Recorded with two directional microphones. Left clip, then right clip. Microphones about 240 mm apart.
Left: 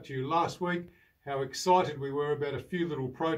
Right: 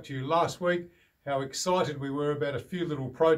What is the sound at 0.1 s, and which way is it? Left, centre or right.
Speech, centre.